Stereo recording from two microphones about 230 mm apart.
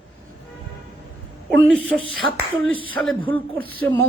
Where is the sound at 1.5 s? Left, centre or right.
Centre.